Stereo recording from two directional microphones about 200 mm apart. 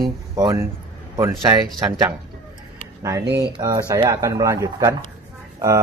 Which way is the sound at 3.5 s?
20° right (ahead or behind).